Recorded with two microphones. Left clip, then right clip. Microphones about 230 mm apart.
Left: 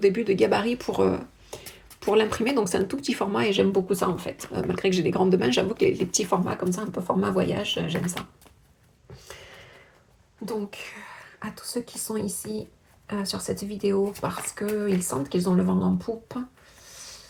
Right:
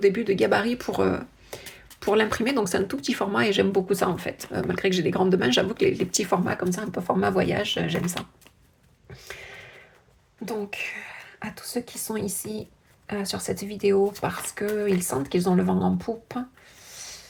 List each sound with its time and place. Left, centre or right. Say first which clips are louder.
0.0 s speech: even; centre; by 7.9 s right
10.4 s speech: right 2 dB; right
13.1 s speech: right 1 dB; right